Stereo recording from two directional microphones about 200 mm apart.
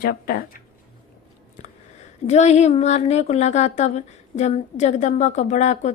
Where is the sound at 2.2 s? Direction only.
35° left (ahead or behind).